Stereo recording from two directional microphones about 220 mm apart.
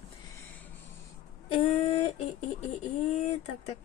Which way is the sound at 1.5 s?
25° left (ahead or behind).